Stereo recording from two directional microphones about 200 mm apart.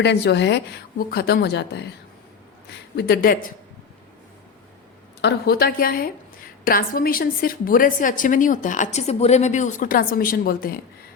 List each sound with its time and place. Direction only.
0.0 s a woman's voice: 60° left (ahead or behind)
2.9 s a woman's voice: 55° left (ahead or behind)
5.2 s a woman's voice: 50° left (ahead or behind)